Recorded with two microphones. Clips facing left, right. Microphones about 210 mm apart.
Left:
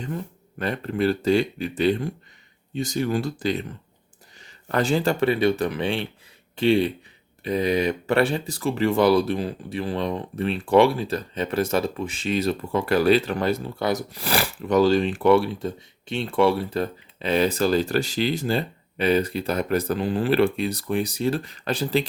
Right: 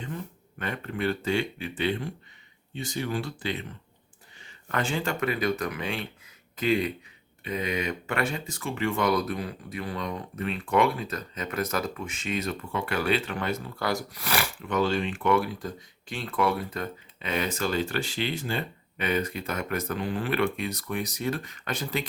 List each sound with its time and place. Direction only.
0.6 s speech: 35° left (ahead or behind)
13.7 s speech: 20° left (ahead or behind)